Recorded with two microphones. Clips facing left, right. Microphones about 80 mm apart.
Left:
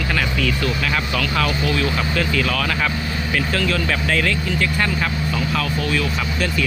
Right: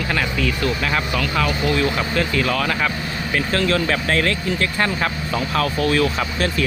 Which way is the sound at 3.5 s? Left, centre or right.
Right.